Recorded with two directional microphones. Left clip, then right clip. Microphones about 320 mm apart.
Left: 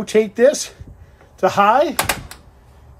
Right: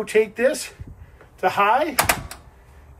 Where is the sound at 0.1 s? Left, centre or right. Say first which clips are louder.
Left 6 dB; centre.